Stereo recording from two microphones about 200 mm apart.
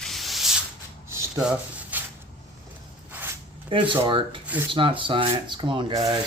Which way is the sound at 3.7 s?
25° right (ahead or behind).